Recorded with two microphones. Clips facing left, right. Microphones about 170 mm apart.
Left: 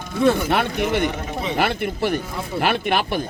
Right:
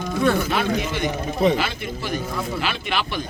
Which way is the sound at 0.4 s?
60° left (ahead or behind).